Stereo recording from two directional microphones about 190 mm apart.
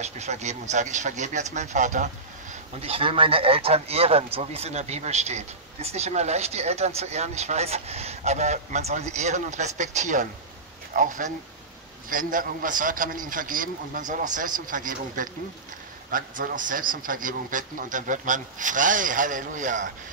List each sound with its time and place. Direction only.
0.0 s a man's voice: 35° right (ahead or behind)